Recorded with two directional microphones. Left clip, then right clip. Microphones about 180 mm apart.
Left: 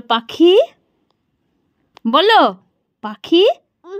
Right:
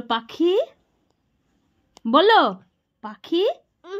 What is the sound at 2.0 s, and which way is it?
A woman's voice, 40° left (ahead or behind).